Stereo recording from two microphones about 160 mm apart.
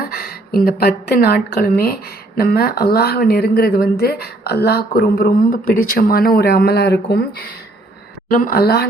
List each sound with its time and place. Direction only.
0.1 s speech: 70° left (ahead or behind)
8.3 s speech: 60° left (ahead or behind)